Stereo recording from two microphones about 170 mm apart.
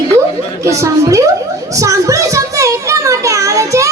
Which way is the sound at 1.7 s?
20° right (ahead or behind).